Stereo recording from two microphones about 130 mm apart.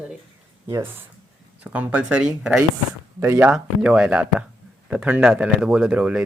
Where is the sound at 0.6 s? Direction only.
15° right (ahead or behind).